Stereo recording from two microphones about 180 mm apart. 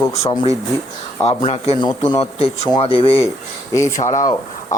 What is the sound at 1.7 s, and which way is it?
Speech, 25° left (ahead or behind).